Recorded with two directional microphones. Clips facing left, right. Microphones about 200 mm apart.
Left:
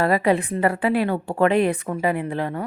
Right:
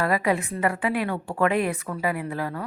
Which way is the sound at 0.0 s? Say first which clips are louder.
Left 4 dB; 30° left (ahead or behind).